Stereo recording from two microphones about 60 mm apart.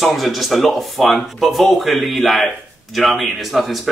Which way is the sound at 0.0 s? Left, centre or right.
Centre.